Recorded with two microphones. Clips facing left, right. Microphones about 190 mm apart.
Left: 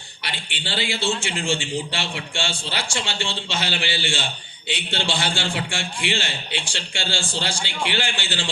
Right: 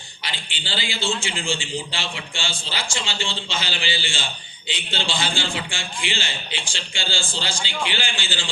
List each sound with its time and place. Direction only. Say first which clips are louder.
0.5 s a man's voice: left 4 dB; 65° left (ahead or behind)